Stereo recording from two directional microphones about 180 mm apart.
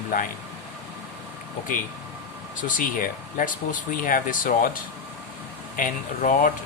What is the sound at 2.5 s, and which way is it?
Speech, 45° left (ahead or behind).